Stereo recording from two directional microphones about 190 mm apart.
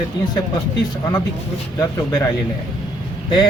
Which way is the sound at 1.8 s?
20° left (ahead or behind).